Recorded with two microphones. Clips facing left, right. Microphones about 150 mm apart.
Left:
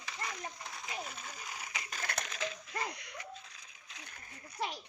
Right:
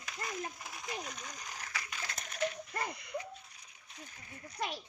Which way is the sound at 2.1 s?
85° left.